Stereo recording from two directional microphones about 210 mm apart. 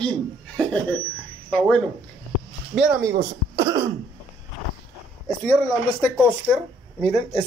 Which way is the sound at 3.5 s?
20° right (ahead or behind).